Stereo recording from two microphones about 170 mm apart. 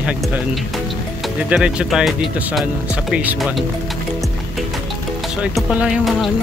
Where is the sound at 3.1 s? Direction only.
5° right (ahead or behind).